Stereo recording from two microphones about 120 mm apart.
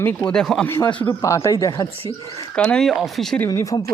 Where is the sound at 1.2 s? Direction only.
25° left (ahead or behind).